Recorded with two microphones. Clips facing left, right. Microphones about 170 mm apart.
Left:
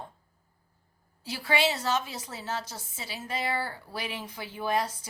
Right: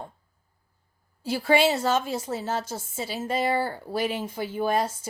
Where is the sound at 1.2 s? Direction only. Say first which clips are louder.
Right 7 dB; 50° right (ahead or behind).